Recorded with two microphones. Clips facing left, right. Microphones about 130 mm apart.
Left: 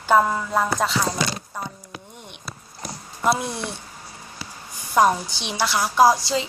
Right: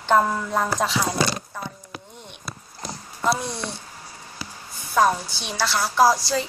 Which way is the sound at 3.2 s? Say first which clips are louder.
Left 2 dB; 15° left (ahead or behind).